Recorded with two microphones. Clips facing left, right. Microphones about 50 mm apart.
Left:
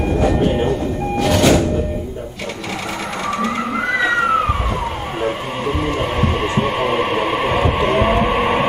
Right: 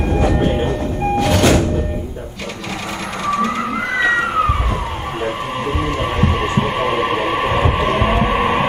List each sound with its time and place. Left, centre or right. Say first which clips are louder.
0.2 s train: left 1 dB; right
1.2 s music: left 2 dB; right
5.9 s a sound: even; right
8.3 s vehicle: even; centre